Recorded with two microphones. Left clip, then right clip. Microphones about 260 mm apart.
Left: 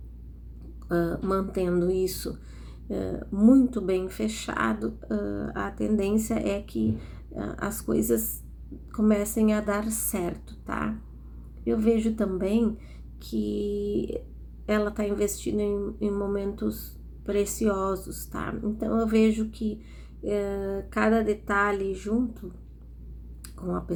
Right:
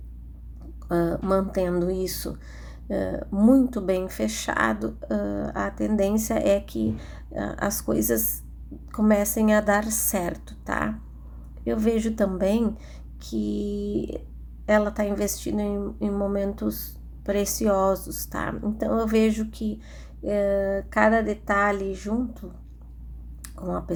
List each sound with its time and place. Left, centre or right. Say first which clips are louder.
0.9 s speech: right 3 dB; right